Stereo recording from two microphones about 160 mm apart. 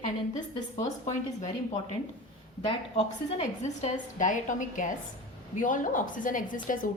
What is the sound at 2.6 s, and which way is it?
A woman's voice, 35° left (ahead or behind).